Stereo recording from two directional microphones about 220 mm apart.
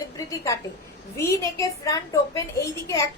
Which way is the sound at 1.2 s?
15° left (ahead or behind).